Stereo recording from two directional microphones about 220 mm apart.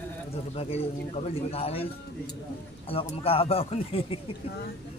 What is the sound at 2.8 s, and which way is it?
A man's voice, 25° left (ahead or behind).